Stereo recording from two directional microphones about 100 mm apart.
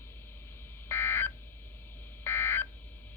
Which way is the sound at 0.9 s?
25° left (ahead or behind).